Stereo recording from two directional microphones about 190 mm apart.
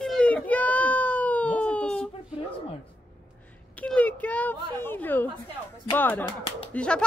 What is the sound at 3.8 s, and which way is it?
Speech, 5° left (ahead or behind).